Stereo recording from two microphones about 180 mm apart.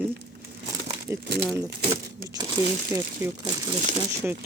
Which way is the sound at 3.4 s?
35° right (ahead or behind).